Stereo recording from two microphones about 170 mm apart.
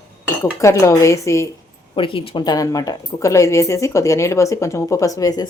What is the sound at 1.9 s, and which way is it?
Speech, 30° left (ahead or behind).